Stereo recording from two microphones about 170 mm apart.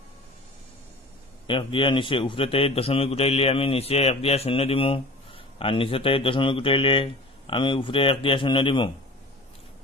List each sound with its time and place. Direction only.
1.5 s a man's voice: 30° left (ahead or behind)